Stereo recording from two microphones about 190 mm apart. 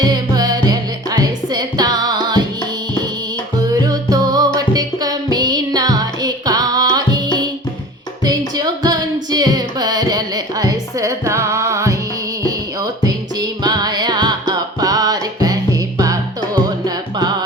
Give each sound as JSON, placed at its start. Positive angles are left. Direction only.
{"t": 0.0, "sound": "music", "side_deg": -20}
{"t": 3.7, "sound": "music", "side_deg": -20}
{"t": 8.2, "sound": "music", "side_deg": -20}
{"t": 13.1, "sound": "music", "side_deg": -20}